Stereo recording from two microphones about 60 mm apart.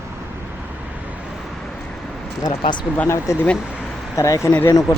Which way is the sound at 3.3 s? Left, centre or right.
Left.